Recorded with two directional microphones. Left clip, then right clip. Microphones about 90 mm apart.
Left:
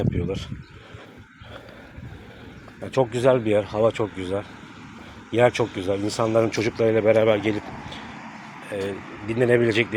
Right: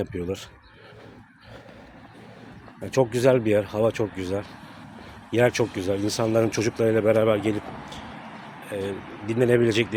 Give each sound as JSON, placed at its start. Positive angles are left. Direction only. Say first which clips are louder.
{"t": 0.1, "sound": "speech", "louder": "left 1 dB", "side_deg": -55}
{"t": 2.8, "sound": "speech", "louder": "left 1 dB", "side_deg": -55}
{"t": 6.8, "sound": "a man's voice", "louder": "left 2 dB", "side_deg": -30}
{"t": 7.6, "sound": "speech", "louder": "left 1 dB", "side_deg": 0}
{"t": 8.6, "sound": "speech", "louder": "left 2 dB", "side_deg": -25}